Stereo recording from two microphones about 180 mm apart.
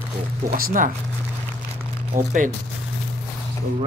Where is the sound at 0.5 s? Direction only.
55° right (ahead or behind).